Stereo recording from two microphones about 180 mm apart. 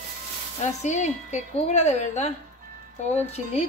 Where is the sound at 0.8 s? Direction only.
40° left (ahead or behind).